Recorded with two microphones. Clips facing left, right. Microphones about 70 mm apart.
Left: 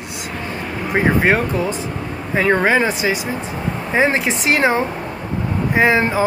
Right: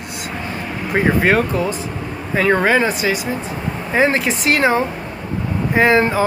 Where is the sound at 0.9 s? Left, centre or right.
Centre.